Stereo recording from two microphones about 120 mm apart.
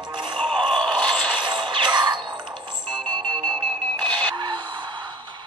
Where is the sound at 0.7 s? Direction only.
10° left (ahead or behind).